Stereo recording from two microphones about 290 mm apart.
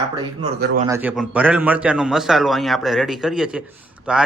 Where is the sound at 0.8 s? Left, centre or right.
Centre.